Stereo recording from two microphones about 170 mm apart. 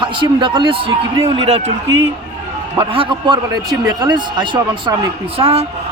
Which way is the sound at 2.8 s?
30° right (ahead or behind).